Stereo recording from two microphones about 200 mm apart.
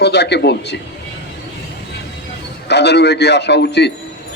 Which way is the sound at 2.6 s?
55° left (ahead or behind).